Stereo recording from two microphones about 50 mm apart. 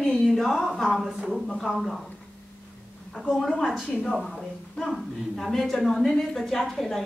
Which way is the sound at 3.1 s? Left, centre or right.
Centre.